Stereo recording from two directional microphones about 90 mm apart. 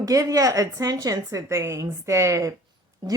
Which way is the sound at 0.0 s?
40° right (ahead or behind).